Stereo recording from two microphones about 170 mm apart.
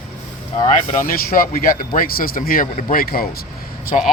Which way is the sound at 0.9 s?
55° left (ahead or behind).